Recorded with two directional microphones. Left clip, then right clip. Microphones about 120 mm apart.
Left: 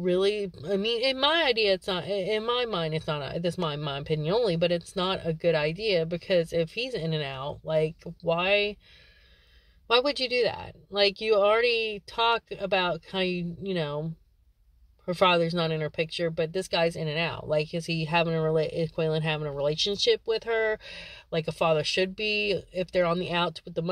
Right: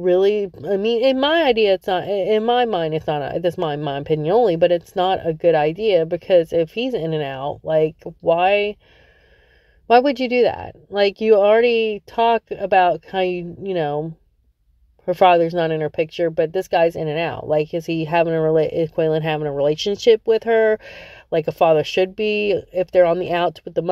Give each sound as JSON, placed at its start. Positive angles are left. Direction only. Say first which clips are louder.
{"t": 0.0, "sound": "speech", "louder": "right 9 dB", "side_deg": -40}
{"t": 9.8, "sound": "speech", "louder": "right 10 dB", "side_deg": -45}
{"t": 15.0, "sound": "speech", "louder": "right 9 dB", "side_deg": -45}